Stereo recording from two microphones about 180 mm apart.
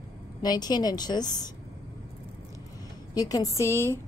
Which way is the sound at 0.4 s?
20° left (ahead or behind).